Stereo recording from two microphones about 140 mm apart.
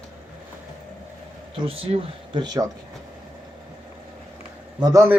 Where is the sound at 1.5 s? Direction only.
40° right (ahead or behind).